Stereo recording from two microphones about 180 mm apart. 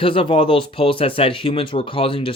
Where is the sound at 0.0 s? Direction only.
30° left (ahead or behind).